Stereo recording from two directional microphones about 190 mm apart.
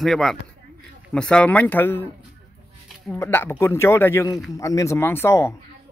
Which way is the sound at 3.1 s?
15° left (ahead or behind).